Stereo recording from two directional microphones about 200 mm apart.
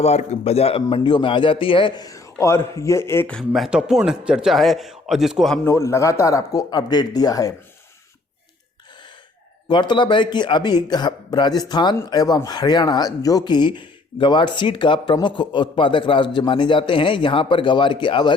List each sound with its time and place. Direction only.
0.0 s a man's voice: 35° left (ahead or behind); by 5.5 s centre (ahead or behind)
5.6 s a man's voice: 15° left (ahead or behind)
9.6 s speech: 20° left (ahead or behind)